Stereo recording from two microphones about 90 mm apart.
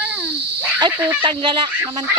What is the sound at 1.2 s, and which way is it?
Speech, 65° right (ahead or behind).